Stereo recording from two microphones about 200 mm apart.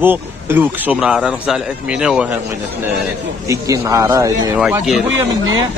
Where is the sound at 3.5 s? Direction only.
15° right (ahead or behind).